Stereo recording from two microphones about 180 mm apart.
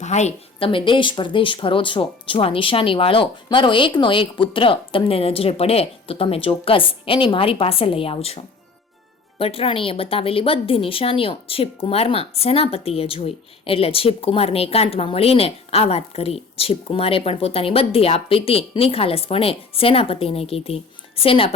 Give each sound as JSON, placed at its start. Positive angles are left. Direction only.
{"t": 0.0, "sound": "a woman's voice", "side_deg": 40}